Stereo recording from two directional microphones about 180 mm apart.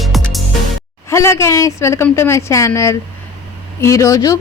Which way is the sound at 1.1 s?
15° left (ahead or behind).